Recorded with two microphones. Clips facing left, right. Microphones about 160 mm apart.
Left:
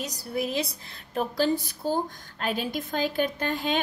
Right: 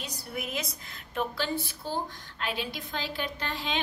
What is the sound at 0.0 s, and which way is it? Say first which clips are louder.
A woman's voice: left 7 dB; 40° left (ahead or behind).